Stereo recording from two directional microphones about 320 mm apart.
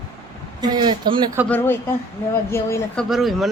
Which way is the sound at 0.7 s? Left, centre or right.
Centre.